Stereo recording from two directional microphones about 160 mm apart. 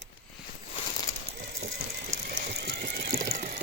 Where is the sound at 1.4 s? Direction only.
90° right.